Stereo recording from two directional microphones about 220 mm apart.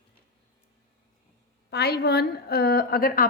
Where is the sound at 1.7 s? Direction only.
45° left (ahead or behind).